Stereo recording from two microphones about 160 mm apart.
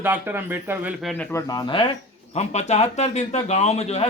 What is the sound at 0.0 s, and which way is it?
Speech, 10° right (ahead or behind).